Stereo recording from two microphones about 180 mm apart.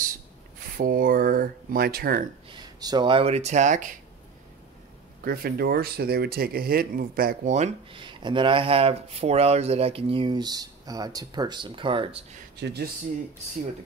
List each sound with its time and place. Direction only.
0.7 s speech: 50° right (ahead or behind)
2.5 s speech: 20° right (ahead or behind); by 3.9 s 40° right (ahead or behind)
5.2 s speech: 55° right (ahead or behind); by 12.3 s 30° right (ahead or behind)
12.5 s speech: 65° right (ahead or behind)